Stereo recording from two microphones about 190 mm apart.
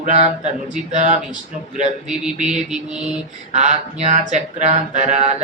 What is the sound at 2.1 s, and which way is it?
Mantra, 5° right (ahead or behind).